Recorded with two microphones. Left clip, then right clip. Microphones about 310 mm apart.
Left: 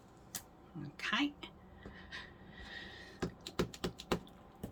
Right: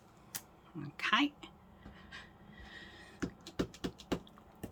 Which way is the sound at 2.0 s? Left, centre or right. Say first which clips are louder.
Left 3 dB; centre.